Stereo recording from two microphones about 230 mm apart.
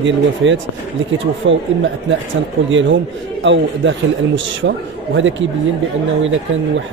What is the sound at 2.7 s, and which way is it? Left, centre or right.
A man's voice, right.